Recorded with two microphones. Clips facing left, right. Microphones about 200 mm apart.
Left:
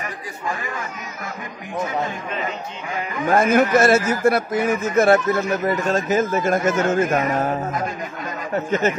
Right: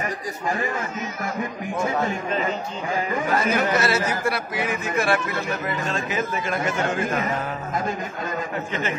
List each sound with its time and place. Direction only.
3.3 s a man's voice: 50° left (ahead or behind)